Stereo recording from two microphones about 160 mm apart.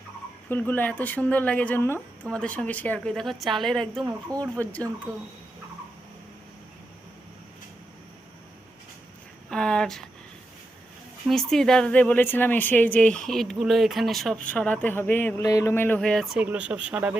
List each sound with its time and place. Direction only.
0.4 s speech: 10° left (ahead or behind)
4.0 s speech: 20° right (ahead or behind)
4.5 s speech: 10° left (ahead or behind)
9.5 s speech: 5° left (ahead or behind)
11.3 s speech: 5° left (ahead or behind)